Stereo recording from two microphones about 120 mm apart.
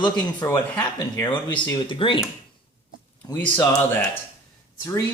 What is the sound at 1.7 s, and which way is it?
Speech, 40° left (ahead or behind).